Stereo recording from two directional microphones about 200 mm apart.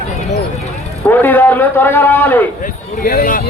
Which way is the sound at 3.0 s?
45° left (ahead or behind).